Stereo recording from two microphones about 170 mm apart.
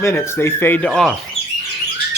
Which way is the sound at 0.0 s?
15° left (ahead or behind).